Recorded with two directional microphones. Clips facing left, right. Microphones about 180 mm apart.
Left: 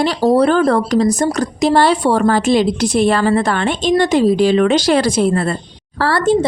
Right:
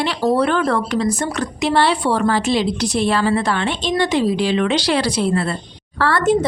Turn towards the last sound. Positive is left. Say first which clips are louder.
# left 2 dB
turn(degrees=30)  # may be behind; listen again after turning